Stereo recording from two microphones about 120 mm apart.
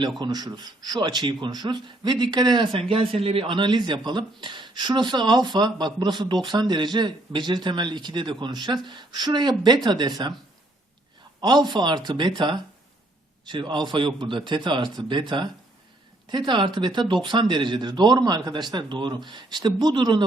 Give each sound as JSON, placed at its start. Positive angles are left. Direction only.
{"t": 0.2, "sound": "speech", "side_deg": -35}
{"t": 11.3, "sound": "speech", "side_deg": -35}